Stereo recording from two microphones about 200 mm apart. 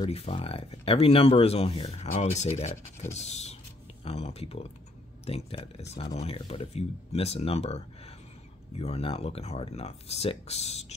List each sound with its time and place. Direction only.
0.0 s speech: 30° left (ahead or behind)